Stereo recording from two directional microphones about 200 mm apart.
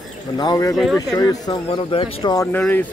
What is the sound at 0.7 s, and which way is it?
Speech, centre (ahead or behind).